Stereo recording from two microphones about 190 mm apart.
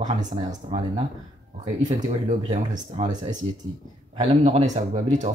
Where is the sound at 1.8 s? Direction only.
20° right (ahead or behind).